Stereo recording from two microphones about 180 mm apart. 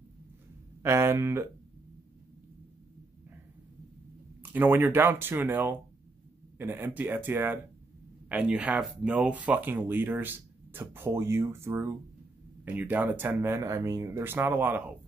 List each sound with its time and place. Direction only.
0.8 s speech: 15° right (ahead or behind)
4.4 s speech: 10° right (ahead or behind)